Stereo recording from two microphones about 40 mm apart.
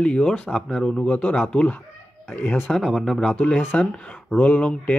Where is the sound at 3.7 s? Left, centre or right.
Left.